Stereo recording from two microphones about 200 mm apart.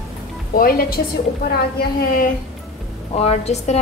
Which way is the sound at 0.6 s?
45° left (ahead or behind).